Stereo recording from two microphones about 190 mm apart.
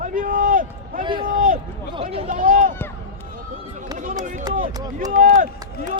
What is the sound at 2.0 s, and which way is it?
Speech, 35° right (ahead or behind).